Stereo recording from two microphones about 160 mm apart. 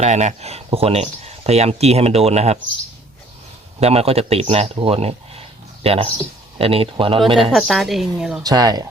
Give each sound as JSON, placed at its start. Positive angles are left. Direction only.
{"t": 0.0, "sound": "speech", "side_deg": -45}
{"t": 3.8, "sound": "speech", "side_deg": -40}
{"t": 7.5, "sound": "a woman's voice", "side_deg": 0}
{"t": 8.4, "sound": "speech", "side_deg": -25}